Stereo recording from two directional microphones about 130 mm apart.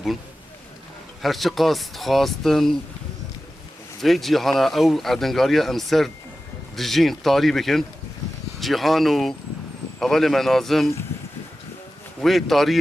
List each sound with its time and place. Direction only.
1.2 s speech: centre (ahead or behind)
4.0 s speech: centre (ahead or behind)
12.2 s speech: centre (ahead or behind)